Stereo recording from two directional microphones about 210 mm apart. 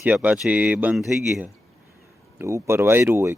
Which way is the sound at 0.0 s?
5° right (ahead or behind).